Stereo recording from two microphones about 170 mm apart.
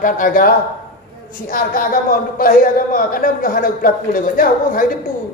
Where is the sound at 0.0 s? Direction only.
55° left (ahead or behind).